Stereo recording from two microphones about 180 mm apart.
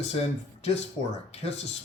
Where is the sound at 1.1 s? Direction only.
40° left (ahead or behind).